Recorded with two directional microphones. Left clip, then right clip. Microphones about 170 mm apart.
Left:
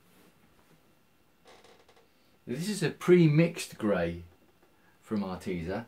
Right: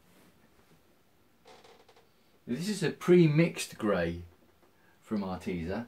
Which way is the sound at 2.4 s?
45° left (ahead or behind).